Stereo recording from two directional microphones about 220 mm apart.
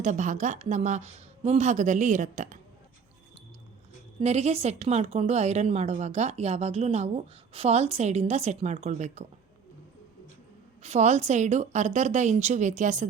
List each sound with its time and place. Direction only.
0.0 s a woman's voice: 35° right (ahead or behind)
4.2 s a woman's voice: 30° right (ahead or behind)
10.8 s a woman's voice: 30° right (ahead or behind)